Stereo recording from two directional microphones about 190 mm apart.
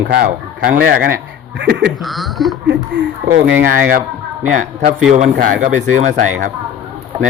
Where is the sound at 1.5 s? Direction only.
65° right (ahead or behind).